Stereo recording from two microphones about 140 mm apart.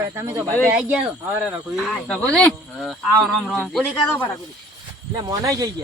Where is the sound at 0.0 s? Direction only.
20° right (ahead or behind); by 3.8 s 5° left (ahead or behind).